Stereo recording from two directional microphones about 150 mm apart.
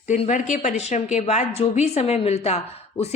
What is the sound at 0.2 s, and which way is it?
A woman's voice, 55° left (ahead or behind).